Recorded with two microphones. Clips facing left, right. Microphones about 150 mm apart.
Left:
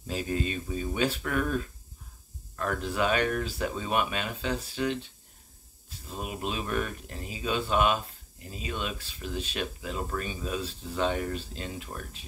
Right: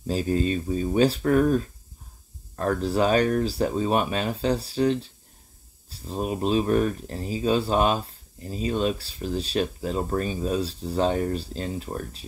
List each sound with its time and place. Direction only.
0.0 s speech: 35° right (ahead or behind)